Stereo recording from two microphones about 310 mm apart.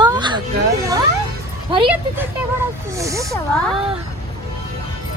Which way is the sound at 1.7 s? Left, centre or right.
Centre.